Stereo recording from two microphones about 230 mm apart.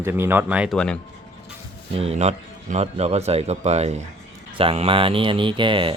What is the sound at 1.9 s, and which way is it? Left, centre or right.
Speech, right.